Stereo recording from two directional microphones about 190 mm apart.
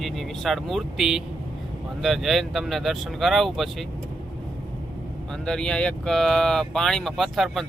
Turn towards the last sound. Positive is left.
turn(degrees=0)  # may be behind; listen again after turning